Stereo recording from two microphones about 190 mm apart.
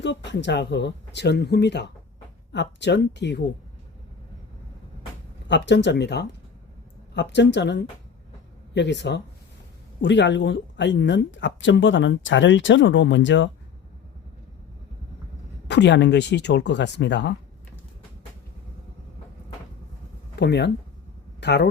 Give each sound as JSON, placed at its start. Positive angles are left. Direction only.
{"t": 0.0, "sound": "speech", "side_deg": 70}
{"t": 5.5, "sound": "speech", "side_deg": 65}
{"t": 15.6, "sound": "speech", "side_deg": 65}
{"t": 20.3, "sound": "speech", "side_deg": 65}